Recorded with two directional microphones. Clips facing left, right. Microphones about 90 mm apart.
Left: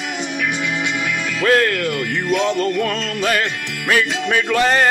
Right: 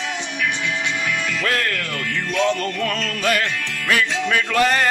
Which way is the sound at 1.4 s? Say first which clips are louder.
Left 11 dB; 30° left (ahead or behind).